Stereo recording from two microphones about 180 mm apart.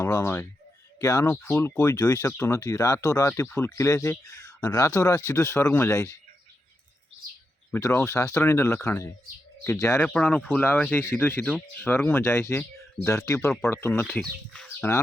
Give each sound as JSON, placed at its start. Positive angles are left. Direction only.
{"t": 0.0, "sound": "speech", "side_deg": 15}
{"t": 7.7, "sound": "speech", "side_deg": 15}